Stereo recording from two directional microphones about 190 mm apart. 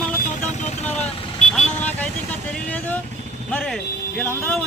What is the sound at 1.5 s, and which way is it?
Speech, 5° left (ahead or behind).